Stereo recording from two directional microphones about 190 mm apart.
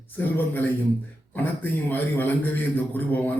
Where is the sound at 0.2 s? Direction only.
10° left (ahead or behind).